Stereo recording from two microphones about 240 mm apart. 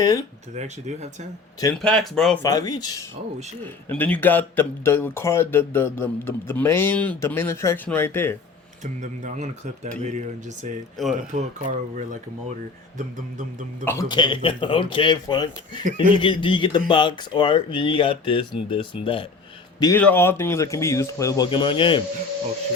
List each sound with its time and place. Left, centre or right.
0.0 s a man's voice: centre
0.5 s speech: right
1.7 s speech: centre
2.4 s a man's voice: centre
8.8 s speech: right
13.8 s speech: centre
19.8 s a man's voice: centre